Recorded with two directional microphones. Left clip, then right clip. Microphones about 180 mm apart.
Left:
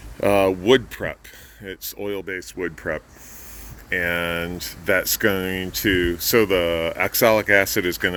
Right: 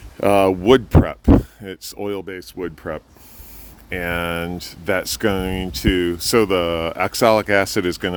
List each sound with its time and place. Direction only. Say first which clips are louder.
0.2 s speech: right 3 dB; 45° right (ahead or behind)